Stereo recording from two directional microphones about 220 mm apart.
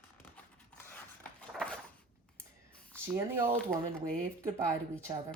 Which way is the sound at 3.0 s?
10° right (ahead or behind).